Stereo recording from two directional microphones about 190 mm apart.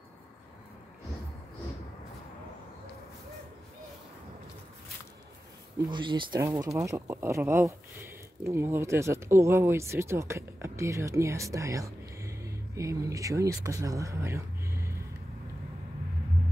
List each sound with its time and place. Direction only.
5.9 s speech: 25° right (ahead or behind)